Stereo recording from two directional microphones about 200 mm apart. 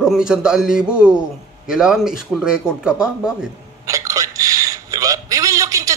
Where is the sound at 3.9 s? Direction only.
15° right (ahead or behind).